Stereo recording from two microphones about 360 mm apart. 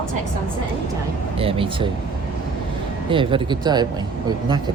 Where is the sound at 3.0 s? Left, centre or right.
Centre.